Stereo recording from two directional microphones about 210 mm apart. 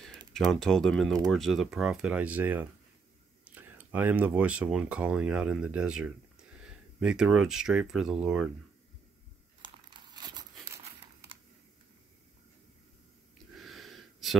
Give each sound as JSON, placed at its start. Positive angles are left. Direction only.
{"t": 0.3, "sound": "speech", "side_deg": 0}
{"t": 9.6, "sound": "crumpling", "side_deg": -20}
{"t": 13.6, "sound": "a sound", "side_deg": 0}